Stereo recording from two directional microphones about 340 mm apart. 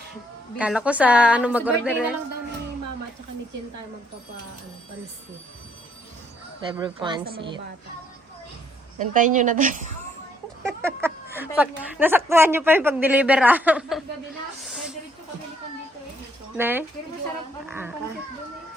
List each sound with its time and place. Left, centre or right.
0.6 s a woman's voice: centre
6.7 s a woman's voice: centre
9.0 s a woman's voice: right
11.0 s a woman's voice: centre
16.6 s a woman's voice: centre